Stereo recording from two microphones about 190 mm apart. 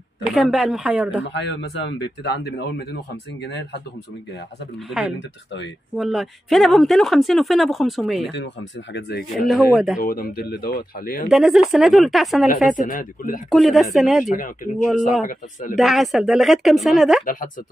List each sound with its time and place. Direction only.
0.3 s speech: centre (ahead or behind)
1.2 s speech: 70° left (ahead or behind)
5.9 s speech: centre (ahead or behind)
9.5 s speech: centre (ahead or behind)
9.9 s speech: 50° left (ahead or behind)
11.2 s speech: 5° right (ahead or behind)
12.6 s speech: 45° left (ahead or behind)
13.5 s speech: centre (ahead or behind)
14.2 s speech: 45° left (ahead or behind)
14.9 s speech: centre (ahead or behind)
17.2 s speech: 45° left (ahead or behind)